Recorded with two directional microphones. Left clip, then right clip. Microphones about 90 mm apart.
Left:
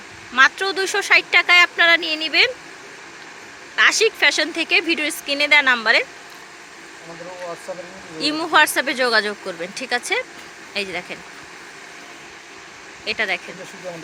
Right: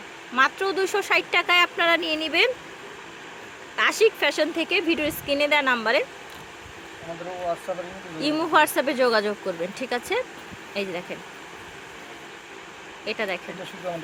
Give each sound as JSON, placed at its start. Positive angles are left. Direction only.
{"t": 0.3, "sound": "speech", "side_deg": -15}
{"t": 3.8, "sound": "speech", "side_deg": -10}
{"t": 8.2, "sound": "speech", "side_deg": -10}
{"t": 13.1, "sound": "speech", "side_deg": -15}